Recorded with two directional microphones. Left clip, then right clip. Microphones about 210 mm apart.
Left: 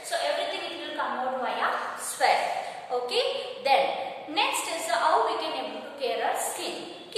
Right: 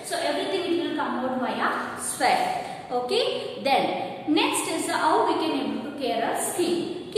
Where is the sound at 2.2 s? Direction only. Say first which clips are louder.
Right 1 dB; centre (ahead or behind).